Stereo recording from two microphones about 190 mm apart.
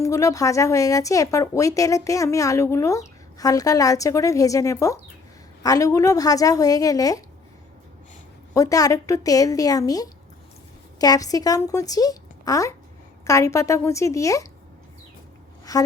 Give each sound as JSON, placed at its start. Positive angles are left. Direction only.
{"t": 0.0, "sound": "a woman's voice", "side_deg": 15}
{"t": 8.5, "sound": "a woman's voice", "side_deg": 20}
{"t": 15.7, "sound": "a sound", "side_deg": 20}